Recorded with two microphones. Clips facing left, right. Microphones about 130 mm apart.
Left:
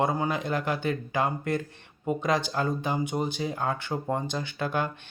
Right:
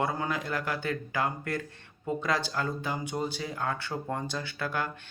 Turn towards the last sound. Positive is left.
turn(degrees=20)  # may be behind; listen again after turning